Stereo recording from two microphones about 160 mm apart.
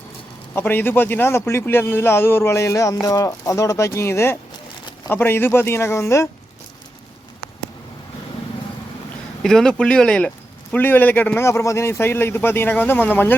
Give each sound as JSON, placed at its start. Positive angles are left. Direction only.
{"t": 0.5, "sound": "speech", "side_deg": 10}
{"t": 9.4, "sound": "speech", "side_deg": 5}